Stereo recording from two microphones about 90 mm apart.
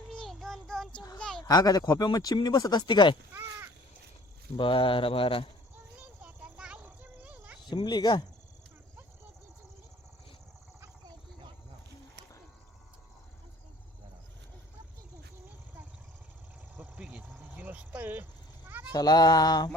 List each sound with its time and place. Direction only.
0.1 s child singing: 5° left (ahead or behind)
1.2 s a sound: 5° left (ahead or behind)
1.5 s speech: 45° left (ahead or behind)
3.3 s crow: 25° right (ahead or behind)
4.5 s speech: 70° left (ahead or behind); by 5.5 s 90° left
5.7 s a sound: 15° right (ahead or behind)
6.8 s dog: 15° right (ahead or behind)
7.7 s speech: 55° left (ahead or behind)
16.7 s vehicle: 15° right (ahead or behind)
18.9 s speech: 50° left (ahead or behind)